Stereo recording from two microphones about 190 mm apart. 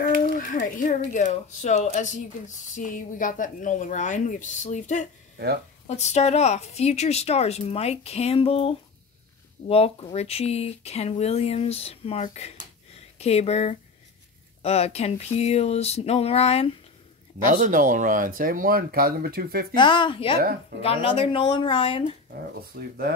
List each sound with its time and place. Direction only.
0.0 s speech: 45° left (ahead or behind)
17.5 s speech: 45° right (ahead or behind)
19.7 s speech: 25° left (ahead or behind)
22.3 s speech: 55° right (ahead or behind)